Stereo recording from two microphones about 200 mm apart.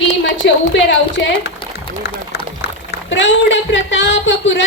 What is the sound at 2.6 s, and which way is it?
A woman's voice, 65° left (ahead or behind).